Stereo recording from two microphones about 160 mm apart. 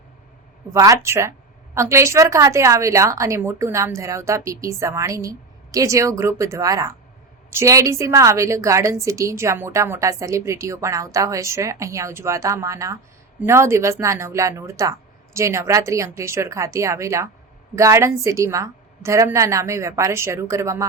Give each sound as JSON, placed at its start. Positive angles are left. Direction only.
{"t": 0.7, "sound": "a woman's voice", "side_deg": -20}